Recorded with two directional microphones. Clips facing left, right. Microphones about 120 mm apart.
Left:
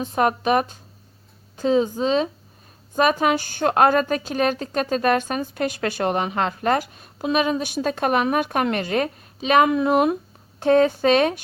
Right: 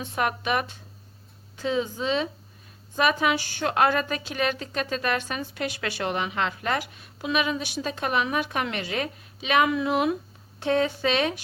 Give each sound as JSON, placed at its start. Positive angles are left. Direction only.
{"t": 0.0, "sound": "a woman's voice", "side_deg": 35}